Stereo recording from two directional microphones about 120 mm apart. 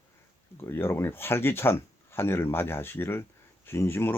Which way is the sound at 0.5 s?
20° left (ahead or behind).